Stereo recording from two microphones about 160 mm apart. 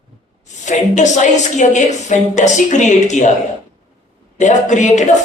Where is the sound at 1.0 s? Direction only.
50° left (ahead or behind).